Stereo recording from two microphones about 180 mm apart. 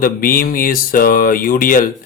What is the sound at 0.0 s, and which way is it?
Speech, 50° left (ahead or behind).